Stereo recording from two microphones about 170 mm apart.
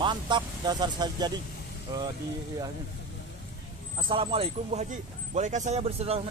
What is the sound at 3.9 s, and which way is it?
Speech, 35° right (ahead or behind).